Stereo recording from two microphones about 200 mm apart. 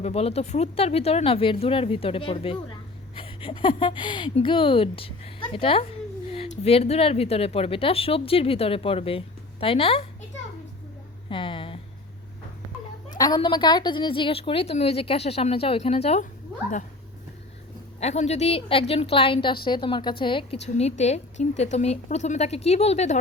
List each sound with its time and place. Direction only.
0.0 s speech: 30° left (ahead or behind)
11.3 s a sound: 25° left (ahead or behind)
13.1 s speech: 20° left (ahead or behind)
18.0 s a woman's voice: 35° left (ahead or behind)